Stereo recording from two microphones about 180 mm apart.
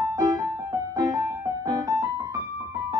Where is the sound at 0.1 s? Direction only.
20° right (ahead or behind).